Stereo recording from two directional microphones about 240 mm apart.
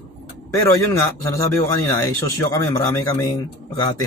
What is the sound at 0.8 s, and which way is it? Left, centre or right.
Speech, centre.